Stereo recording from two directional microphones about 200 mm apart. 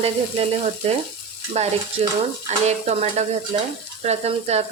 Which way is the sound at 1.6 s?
35° right (ahead or behind).